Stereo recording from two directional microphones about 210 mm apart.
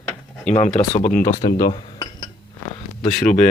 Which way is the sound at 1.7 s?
25° left (ahead or behind).